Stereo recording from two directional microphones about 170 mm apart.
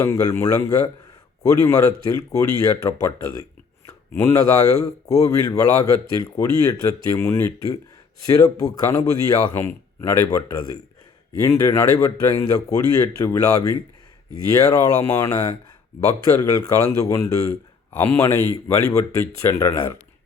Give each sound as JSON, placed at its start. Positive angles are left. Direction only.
{"t": 0.0, "sound": "speech", "side_deg": 20}
{"t": 16.4, "sound": "speech", "side_deg": 20}